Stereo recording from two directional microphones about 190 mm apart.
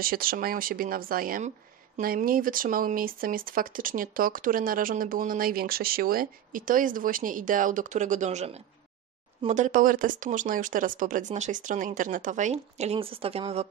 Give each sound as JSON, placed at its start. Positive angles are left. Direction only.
{"t": 0.0, "sound": "speech", "side_deg": -50}